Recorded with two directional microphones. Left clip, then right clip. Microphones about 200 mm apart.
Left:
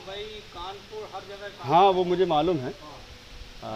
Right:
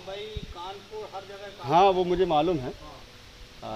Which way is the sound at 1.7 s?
10° left (ahead or behind).